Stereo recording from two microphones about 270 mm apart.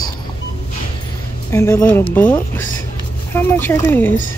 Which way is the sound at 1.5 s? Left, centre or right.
Centre.